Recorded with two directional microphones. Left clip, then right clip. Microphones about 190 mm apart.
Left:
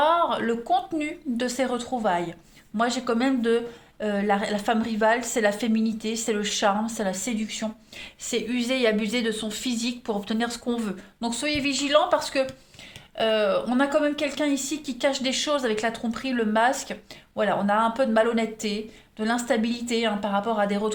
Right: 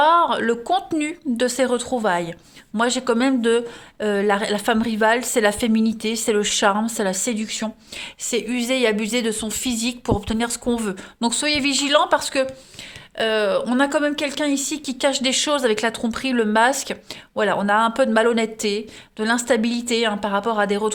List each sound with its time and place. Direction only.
0.0 s a woman's voice: 60° right (ahead or behind)